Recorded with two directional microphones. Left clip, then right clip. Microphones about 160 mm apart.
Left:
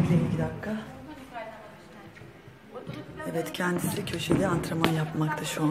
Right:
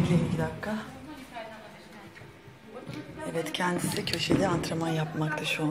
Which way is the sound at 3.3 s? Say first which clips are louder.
Even; 25° left (ahead or behind).